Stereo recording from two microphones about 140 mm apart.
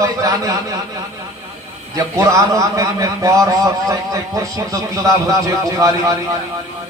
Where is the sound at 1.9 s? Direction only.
20° right (ahead or behind).